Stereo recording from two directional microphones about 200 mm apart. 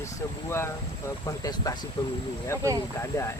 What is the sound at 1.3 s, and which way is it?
Speech, 20° left (ahead or behind).